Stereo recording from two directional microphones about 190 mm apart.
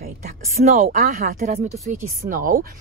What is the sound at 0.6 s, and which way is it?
Speech, 35° right (ahead or behind).